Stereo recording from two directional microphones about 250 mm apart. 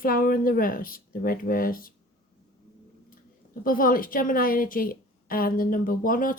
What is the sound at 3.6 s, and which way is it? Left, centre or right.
Speech, left.